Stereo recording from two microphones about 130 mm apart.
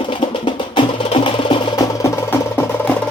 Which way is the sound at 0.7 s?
40° left (ahead or behind).